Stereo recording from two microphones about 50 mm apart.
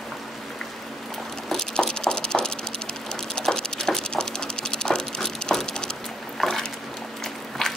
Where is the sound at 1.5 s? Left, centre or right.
Centre.